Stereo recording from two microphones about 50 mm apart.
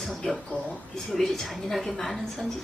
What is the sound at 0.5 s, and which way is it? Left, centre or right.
Speech, left.